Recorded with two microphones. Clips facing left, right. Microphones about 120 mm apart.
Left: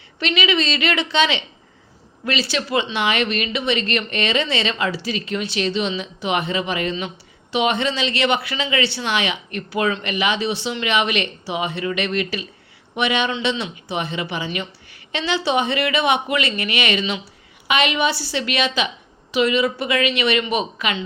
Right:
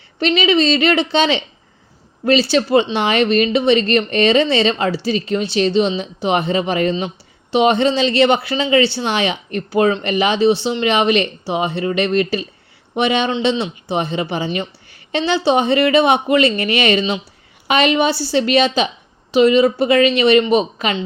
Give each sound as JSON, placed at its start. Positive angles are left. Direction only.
{"t": 0.2, "sound": "speech", "side_deg": -35}